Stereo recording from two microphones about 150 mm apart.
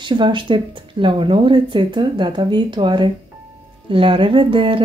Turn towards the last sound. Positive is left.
turn(degrees=-35)  # may be behind; listen again after turning